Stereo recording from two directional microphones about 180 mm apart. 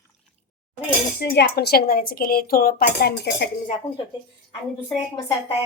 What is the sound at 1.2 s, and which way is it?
Speech, 65° left (ahead or behind).